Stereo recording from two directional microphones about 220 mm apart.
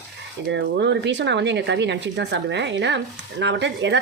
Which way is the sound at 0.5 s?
55° right (ahead or behind).